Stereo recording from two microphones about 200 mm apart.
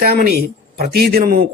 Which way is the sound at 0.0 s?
50° right (ahead or behind).